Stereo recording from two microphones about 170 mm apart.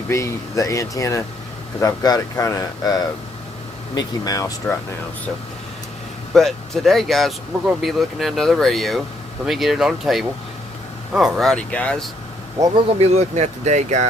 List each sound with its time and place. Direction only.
0.1 s speech: 15° left (ahead or behind)
6.3 s speech: centre (ahead or behind)
12.5 s speech: 20° right (ahead or behind)
13.0 s speech: 40° right (ahead or behind)